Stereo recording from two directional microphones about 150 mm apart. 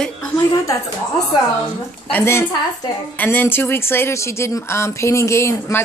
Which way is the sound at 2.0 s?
15° left (ahead or behind).